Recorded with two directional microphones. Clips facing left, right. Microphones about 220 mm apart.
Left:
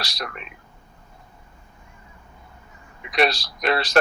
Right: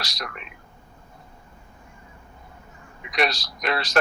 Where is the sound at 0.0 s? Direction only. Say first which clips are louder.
Left 3 dB; 30° left (ahead or behind).